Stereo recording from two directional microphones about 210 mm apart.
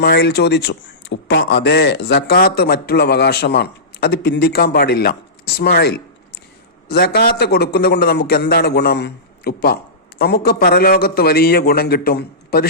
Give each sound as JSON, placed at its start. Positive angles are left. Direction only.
{"t": 0.0, "sound": "a man's voice", "side_deg": 50}